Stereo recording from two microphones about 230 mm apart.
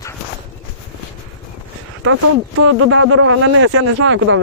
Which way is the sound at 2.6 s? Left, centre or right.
Right.